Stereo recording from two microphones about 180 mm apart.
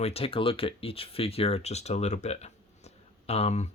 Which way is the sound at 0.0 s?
35° left (ahead or behind).